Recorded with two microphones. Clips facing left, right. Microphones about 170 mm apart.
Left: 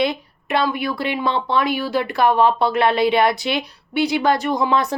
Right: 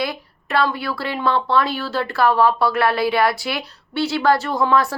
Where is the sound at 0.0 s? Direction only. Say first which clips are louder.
Left 4 dB; 20° left (ahead or behind).